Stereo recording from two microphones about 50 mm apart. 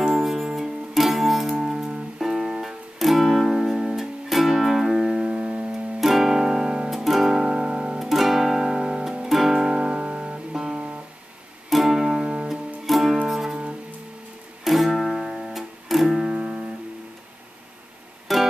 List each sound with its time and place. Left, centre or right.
0.0 s music: centre
6.9 s music: centre
8.0 s music: centre
12.8 s music: centre
14.6 s music: centre
18.3 s music: centre